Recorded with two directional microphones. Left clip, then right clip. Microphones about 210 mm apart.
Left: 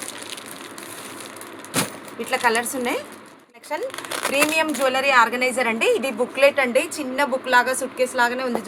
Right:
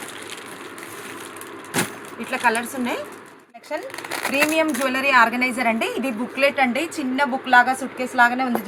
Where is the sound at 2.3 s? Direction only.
55° left (ahead or behind).